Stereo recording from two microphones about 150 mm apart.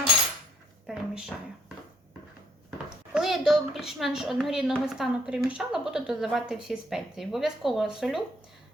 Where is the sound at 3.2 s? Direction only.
Centre (ahead or behind).